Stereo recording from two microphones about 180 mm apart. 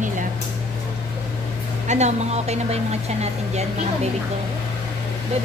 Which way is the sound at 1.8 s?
40° right (ahead or behind).